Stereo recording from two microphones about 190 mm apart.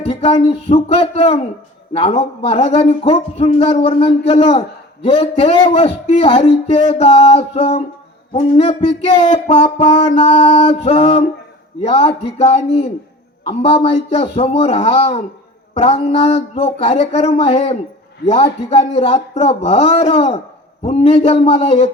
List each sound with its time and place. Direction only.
0.0 s a man's voice: 35° left (ahead or behind)